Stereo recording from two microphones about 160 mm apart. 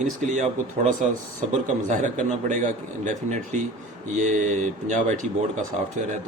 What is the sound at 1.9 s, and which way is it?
Speech, 50° right (ahead or behind).